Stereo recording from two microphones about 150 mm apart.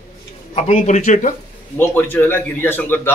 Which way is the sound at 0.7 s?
50° left (ahead or behind).